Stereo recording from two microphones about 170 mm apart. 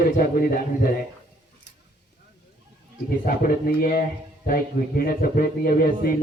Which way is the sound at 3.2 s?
55° left (ahead or behind).